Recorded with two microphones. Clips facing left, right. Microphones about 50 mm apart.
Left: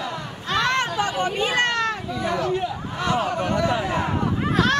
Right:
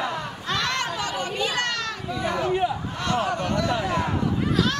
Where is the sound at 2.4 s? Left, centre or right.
Centre.